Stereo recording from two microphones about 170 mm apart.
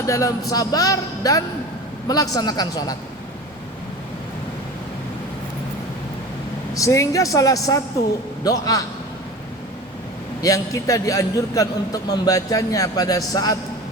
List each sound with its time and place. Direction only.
0.0 s a man's voice: 20° left (ahead or behind)
6.7 s a man's voice: 20° left (ahead or behind)
10.4 s a man's voice: 20° left (ahead or behind)